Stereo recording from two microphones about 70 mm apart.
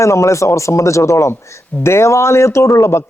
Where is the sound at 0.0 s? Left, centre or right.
Left.